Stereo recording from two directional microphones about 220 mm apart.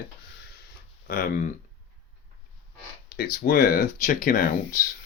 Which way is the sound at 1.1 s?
40° left (ahead or behind).